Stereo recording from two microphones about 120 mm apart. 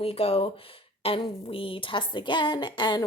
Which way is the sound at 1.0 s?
50° left (ahead or behind).